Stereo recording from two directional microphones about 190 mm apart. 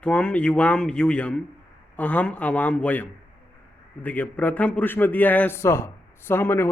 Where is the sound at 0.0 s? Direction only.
5° left (ahead or behind).